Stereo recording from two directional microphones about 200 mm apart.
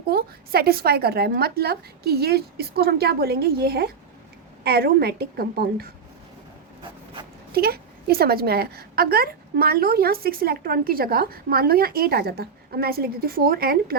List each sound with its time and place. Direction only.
0.1 s a woman's voice: 50° right (ahead or behind)
7.5 s a woman's voice: 50° right (ahead or behind)